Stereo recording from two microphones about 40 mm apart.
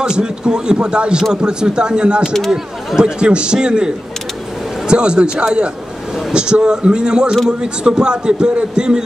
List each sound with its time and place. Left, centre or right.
0.0 s a man's voice: right